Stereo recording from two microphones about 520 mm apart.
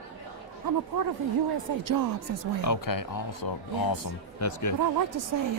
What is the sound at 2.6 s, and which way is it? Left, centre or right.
Speech, left.